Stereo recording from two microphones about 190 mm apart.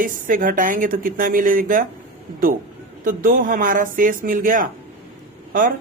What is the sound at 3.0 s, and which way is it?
Speech, 50° right (ahead or behind).